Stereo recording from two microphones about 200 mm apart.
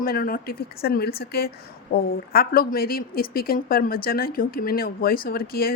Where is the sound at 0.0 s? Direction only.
45° left (ahead or behind).